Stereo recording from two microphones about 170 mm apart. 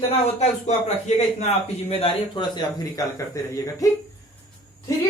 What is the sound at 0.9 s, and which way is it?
A man's voice, 40° left (ahead or behind).